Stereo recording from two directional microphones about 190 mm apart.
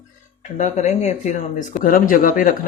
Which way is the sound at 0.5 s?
35° left (ahead or behind).